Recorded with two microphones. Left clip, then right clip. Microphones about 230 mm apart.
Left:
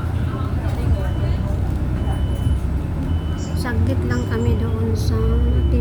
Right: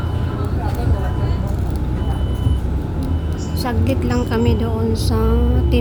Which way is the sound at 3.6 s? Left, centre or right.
Centre.